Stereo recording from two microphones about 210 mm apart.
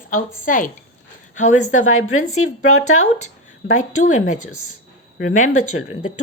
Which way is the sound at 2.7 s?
80° left.